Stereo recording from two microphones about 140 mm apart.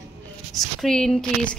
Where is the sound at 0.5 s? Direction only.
5° left (ahead or behind).